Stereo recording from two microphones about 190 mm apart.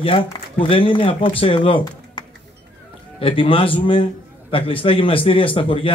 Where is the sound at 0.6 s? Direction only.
30° left (ahead or behind).